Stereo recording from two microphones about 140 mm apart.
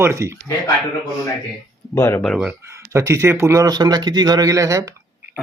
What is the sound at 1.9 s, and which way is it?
Speech, 25° left (ahead or behind).